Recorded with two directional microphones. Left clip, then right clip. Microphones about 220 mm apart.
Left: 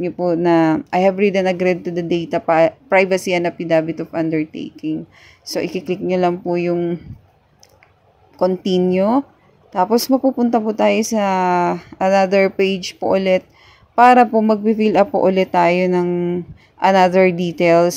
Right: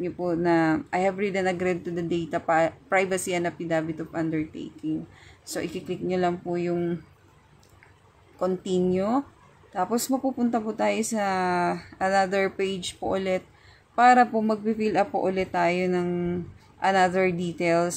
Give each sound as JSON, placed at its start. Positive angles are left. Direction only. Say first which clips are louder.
{"t": 0.0, "sound": "speech", "louder": "left 9 dB", "side_deg": 25}
{"t": 5.5, "sound": "speech", "louder": "left 10 dB", "side_deg": 25}
{"t": 8.4, "sound": "speech", "louder": "left 9 dB", "side_deg": 30}